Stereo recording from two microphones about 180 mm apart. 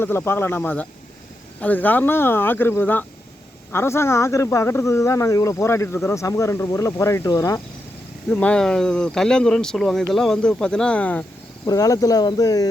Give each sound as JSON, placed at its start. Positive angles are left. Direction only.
{"t": 0.0, "sound": "speech", "side_deg": 10}
{"t": 8.3, "sound": "speech", "side_deg": 5}
{"t": 11.6, "sound": "speech", "side_deg": 20}